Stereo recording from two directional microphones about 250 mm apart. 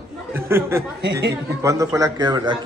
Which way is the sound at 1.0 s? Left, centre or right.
Right.